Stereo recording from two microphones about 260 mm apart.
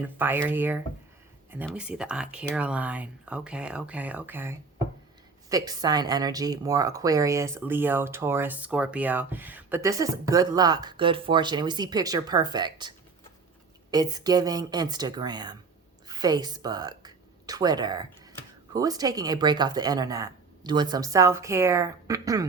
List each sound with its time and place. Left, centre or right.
0.2 s speech: centre
13.9 s a woman's voice: centre